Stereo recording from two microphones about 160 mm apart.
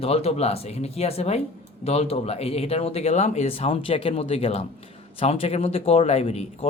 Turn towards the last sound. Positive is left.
turn(degrees=40)  # may be behind; listen again after turning